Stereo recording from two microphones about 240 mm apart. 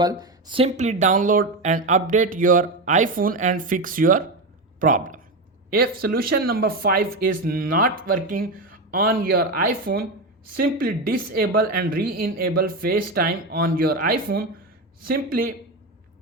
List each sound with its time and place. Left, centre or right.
0.0 s speech: centre; by 15.5 s right